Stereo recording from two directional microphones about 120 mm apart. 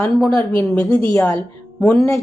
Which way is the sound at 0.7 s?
15° left (ahead or behind).